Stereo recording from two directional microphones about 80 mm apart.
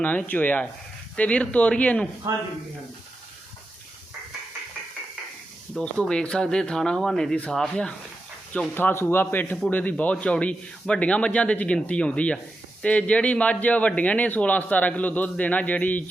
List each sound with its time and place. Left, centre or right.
0.0 s a man's voice: centre
2.3 s speech: right
5.8 s speech: centre
8.7 s a man's voice: left